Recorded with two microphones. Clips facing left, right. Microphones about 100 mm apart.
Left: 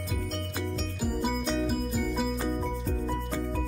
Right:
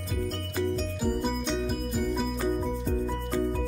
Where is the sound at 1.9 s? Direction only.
Centre (ahead or behind).